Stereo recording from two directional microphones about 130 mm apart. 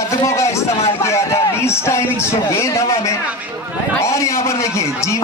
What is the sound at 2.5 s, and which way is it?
A man's voice, 25° left (ahead or behind).